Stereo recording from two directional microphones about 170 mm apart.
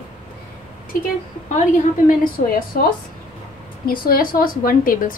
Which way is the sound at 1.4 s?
45° left (ahead or behind).